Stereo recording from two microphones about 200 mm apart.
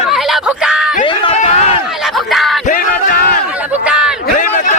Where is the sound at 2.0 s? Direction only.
Centre (ahead or behind).